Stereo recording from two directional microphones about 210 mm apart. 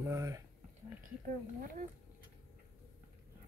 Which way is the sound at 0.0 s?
15° right (ahead or behind).